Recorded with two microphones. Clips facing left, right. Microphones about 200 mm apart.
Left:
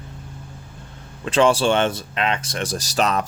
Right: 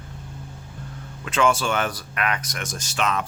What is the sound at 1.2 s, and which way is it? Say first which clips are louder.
Speech: left 5 dB; 30° left (ahead or behind).